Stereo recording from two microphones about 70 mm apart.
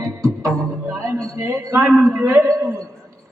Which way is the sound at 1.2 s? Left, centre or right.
Right.